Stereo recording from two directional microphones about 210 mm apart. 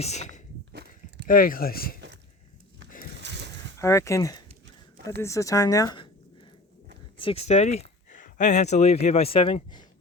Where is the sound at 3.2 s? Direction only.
55° right (ahead or behind).